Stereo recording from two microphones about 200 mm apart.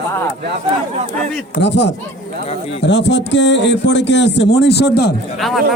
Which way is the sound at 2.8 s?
60° left (ahead or behind).